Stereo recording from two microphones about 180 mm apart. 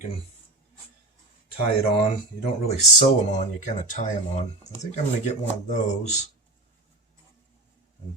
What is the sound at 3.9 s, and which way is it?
Speech, 40° left (ahead or behind).